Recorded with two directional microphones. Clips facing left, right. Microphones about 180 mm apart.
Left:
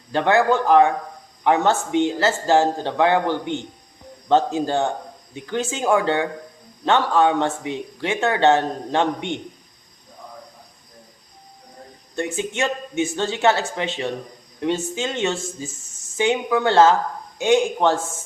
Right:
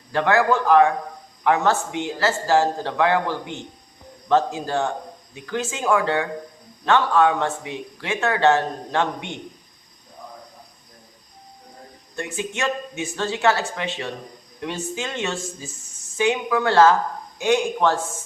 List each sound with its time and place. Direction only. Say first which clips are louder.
0.1 s a man's voice: left 1 dB; 25° left (ahead or behind)
12.1 s a man's voice: left 4 dB; 25° left (ahead or behind)